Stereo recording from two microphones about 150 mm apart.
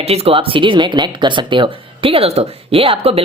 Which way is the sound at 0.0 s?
40° right (ahead or behind).